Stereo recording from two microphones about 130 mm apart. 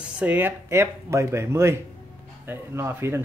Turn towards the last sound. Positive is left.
turn(degrees=-20)  # may be behind; listen again after turning